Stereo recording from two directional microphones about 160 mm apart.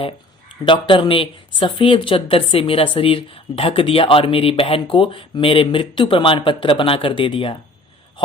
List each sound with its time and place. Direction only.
0.6 s a woman's voice: 30° left (ahead or behind)